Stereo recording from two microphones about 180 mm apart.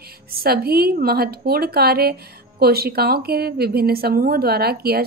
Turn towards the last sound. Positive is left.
turn(degrees=-60)  # may be behind; listen again after turning